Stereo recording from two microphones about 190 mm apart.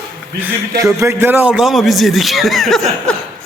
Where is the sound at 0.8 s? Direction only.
15° right (ahead or behind).